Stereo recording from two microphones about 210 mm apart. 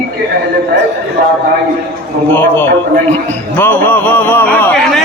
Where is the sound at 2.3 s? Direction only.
10° left (ahead or behind).